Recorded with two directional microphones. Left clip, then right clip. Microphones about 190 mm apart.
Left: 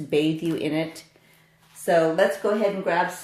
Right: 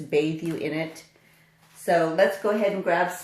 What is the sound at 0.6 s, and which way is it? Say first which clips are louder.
Speech: left 3 dB; 35° left (ahead or behind).